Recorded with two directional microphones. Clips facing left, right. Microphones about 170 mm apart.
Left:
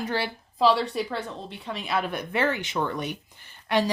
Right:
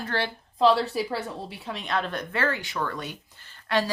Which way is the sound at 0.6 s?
Centre (ahead or behind).